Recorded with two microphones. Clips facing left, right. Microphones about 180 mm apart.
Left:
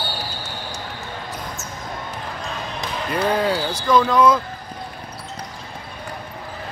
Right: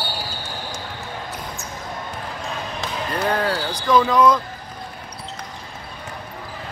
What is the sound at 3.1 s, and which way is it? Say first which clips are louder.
Speech: left 2 dB; 10° left (ahead or behind).